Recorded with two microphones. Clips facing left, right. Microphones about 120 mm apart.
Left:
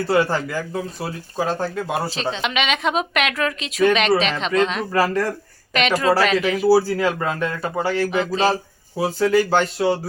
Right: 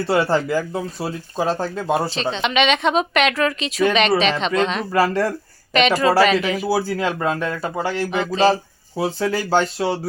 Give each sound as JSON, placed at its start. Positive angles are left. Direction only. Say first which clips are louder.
{"t": 0.1, "sound": "speech", "louder": "right 2 dB", "side_deg": -25}
{"t": 2.0, "sound": "a woman's voice", "louder": "right 2 dB", "side_deg": 5}
{"t": 4.9, "sound": "speech", "louder": "right 1 dB", "side_deg": -25}
{"t": 5.7, "sound": "a woman's voice", "louder": "right 2 dB", "side_deg": 0}
{"t": 6.7, "sound": "speech", "louder": "left 8 dB", "side_deg": -20}
{"t": 8.1, "sound": "a woman's voice", "louder": "right 6 dB", "side_deg": 0}
{"t": 9.1, "sound": "speech", "louder": "left 3 dB", "side_deg": -25}